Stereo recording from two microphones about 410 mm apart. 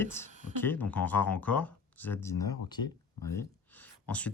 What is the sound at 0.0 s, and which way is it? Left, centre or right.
Speech, centre.